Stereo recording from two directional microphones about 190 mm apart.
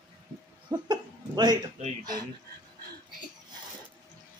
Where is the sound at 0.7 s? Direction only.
20° right (ahead or behind).